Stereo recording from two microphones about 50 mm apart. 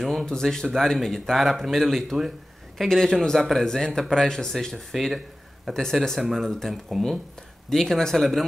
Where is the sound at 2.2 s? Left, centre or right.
Centre.